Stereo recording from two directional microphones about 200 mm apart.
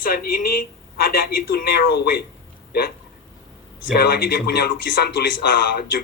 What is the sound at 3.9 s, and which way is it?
Speech, 50° left (ahead or behind).